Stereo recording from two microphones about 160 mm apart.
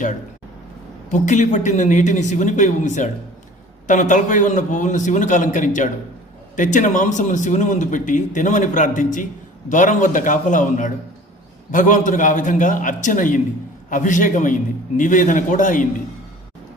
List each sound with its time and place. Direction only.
1.1 s a man's voice: 50° left (ahead or behind)